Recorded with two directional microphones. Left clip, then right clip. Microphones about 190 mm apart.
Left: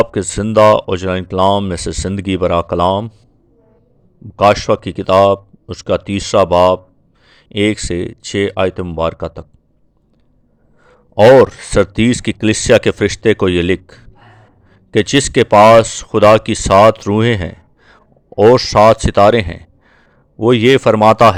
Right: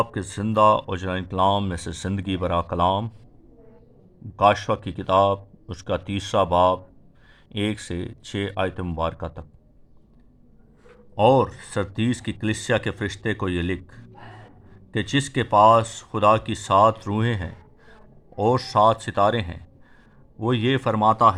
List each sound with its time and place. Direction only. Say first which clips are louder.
0.0 s speech: left 11 dB; 35° left (ahead or behind)
4.4 s speech: left 8 dB; 30° left (ahead or behind)
11.1 s speech: left 12 dB; 40° left (ahead or behind)